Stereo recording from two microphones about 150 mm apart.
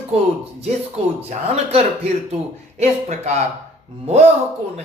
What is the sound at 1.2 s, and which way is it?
Speech, 45° right (ahead or behind).